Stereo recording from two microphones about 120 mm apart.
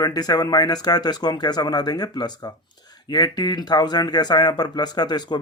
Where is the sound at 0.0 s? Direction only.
30° left (ahead or behind).